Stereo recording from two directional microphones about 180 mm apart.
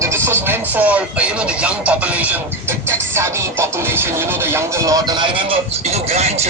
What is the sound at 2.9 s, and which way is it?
Music, 15° right (ahead or behind).